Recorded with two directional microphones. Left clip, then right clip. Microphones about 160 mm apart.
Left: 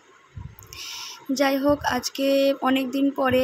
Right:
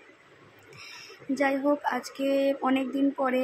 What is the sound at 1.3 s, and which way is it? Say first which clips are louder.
Speech: left 4 dB; 25° left (ahead or behind).